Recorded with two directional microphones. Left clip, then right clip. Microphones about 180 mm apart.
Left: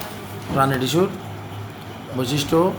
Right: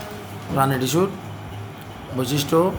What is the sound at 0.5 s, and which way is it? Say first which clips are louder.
Speech: left 1 dB; centre (ahead or behind).